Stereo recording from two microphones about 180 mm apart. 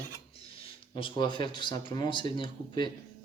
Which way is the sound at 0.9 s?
25° left (ahead or behind).